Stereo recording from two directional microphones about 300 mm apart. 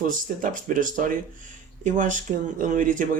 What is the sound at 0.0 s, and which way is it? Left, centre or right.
Speech, right.